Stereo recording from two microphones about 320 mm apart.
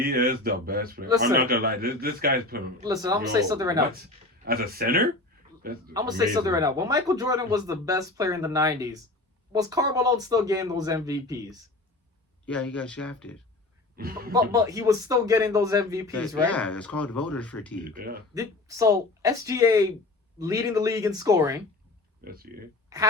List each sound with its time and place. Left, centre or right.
0.0 s a man's voice: right
2.8 s speech: centre
4.4 s a man's voice: right
5.9 s speech: centre
12.5 s speech: centre
13.9 s speech: right
14.5 s speech: centre
16.5 s speech: centre
17.8 s a man's voice: right
18.3 s speech: centre
22.2 s a man's voice: right
22.9 s a woman's voice: centre